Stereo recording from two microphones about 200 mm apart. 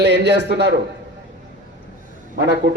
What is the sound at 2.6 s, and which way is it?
Speech, 60° right (ahead or behind).